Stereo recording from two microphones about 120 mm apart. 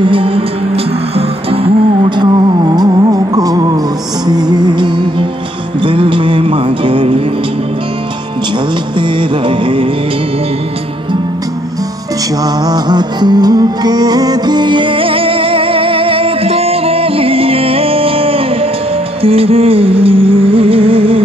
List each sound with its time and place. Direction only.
0.0 s music: 45° right (ahead or behind)
2.0 s music: 40° right (ahead or behind)
9.5 s music: 45° right (ahead or behind)
12.6 s music: 35° right (ahead or behind); by 21.2 s 50° right (ahead or behind)